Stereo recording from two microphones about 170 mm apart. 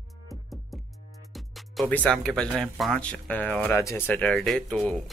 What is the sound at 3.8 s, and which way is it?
Speech, 20° left (ahead or behind).